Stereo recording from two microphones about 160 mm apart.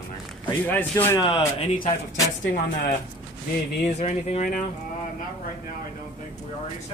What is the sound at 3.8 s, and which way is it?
Speech, 45° left (ahead or behind).